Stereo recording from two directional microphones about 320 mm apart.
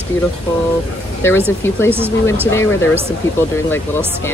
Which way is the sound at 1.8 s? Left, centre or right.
Centre.